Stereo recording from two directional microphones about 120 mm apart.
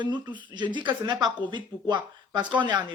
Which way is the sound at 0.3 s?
40° right (ahead or behind).